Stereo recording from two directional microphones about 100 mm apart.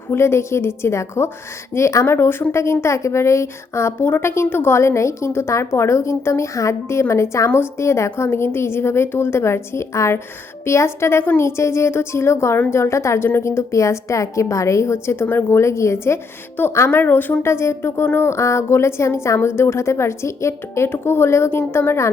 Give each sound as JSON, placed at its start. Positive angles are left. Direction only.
{"t": 0.1, "sound": "a woman's voice", "side_deg": 25}